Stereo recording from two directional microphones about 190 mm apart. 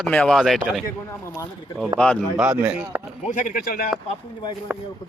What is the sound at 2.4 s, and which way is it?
Speech, 10° right (ahead or behind).